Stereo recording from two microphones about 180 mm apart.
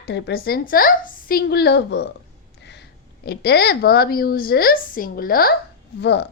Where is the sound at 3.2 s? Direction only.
65° left (ahead or behind).